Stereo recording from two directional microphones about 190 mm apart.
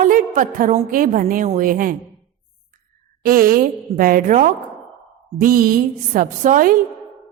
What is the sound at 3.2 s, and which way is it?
A woman's voice, 50° right (ahead or behind).